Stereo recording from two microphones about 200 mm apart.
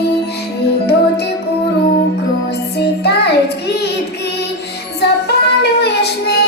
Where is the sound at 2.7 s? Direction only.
55° left (ahead or behind).